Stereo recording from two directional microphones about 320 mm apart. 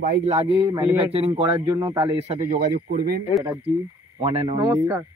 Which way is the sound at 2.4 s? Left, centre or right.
Right.